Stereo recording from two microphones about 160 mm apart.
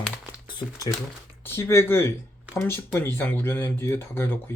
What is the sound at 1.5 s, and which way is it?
Speech, 15° left (ahead or behind).